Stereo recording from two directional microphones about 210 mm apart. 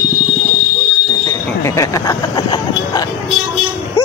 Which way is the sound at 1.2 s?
15° left (ahead or behind).